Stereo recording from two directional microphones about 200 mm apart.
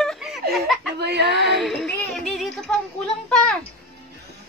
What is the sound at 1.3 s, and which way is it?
A woman's voice, centre (ahead or behind).